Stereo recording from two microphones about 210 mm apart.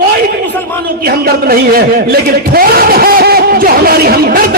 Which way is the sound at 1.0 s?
45° right (ahead or behind).